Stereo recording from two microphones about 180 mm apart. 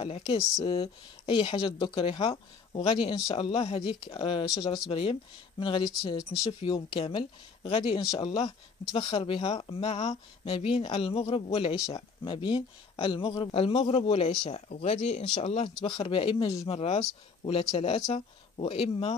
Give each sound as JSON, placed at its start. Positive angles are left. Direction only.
{"t": 0.0, "sound": "speech", "side_deg": 30}